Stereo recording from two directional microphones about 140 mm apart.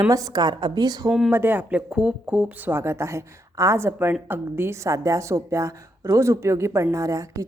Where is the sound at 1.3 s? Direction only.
15° right (ahead or behind).